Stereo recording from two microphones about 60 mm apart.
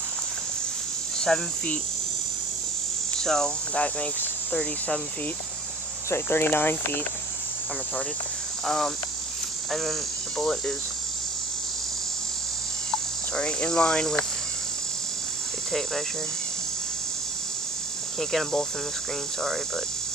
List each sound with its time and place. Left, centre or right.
1.3 s cricket: centre
3.2 s cricket: centre
3.7 s cricket: centre
6.0 s speech: left
8.6 s cricket: centre
12.9 s cricket: centre
18.3 s cricket: centre